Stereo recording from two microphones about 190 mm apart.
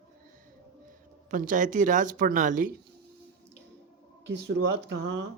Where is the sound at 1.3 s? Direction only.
45° right (ahead or behind).